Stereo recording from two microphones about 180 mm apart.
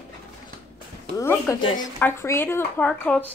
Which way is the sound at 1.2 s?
15° left (ahead or behind).